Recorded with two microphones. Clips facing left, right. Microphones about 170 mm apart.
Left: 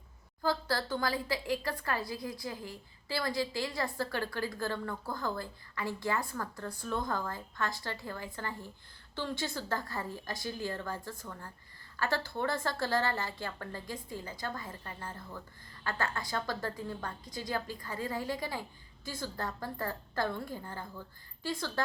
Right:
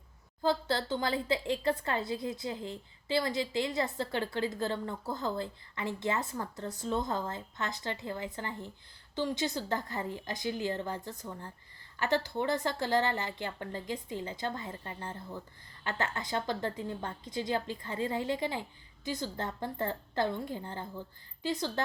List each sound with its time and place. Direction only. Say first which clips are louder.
0.4 s a woman's voice: right 2 dB; 25° right (ahead or behind)